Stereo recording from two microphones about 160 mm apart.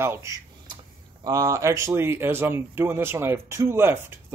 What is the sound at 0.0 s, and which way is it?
A man's voice, 15° right (ahead or behind).